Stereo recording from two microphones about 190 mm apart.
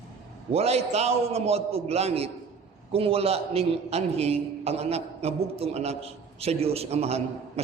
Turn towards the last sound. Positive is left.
turn(degrees=-35)  # may be behind; listen again after turning